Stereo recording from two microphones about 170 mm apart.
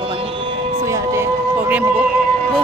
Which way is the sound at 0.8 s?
15° right (ahead or behind).